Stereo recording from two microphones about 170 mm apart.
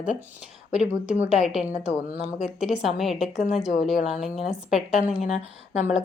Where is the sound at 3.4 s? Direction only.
40° left (ahead or behind).